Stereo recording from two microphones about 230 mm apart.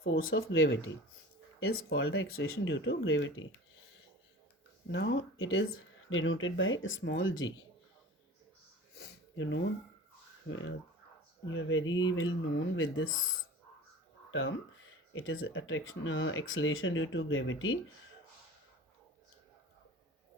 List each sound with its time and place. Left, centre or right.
0.0 s speech: left
1.6 s speech: left
2.0 s speech: left
4.9 s speech: left
9.0 s sniff: left
10.5 s speech: left